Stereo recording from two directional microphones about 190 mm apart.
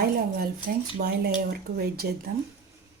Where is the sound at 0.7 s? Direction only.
50° right (ahead or behind).